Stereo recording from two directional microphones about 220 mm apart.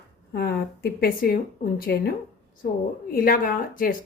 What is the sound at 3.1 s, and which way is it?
Speech, 40° left (ahead or behind).